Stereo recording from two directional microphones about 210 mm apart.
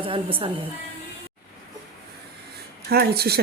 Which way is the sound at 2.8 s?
50° right (ahead or behind).